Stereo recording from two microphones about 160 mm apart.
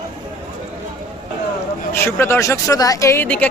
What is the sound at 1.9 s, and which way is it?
Speech, 15° left (ahead or behind).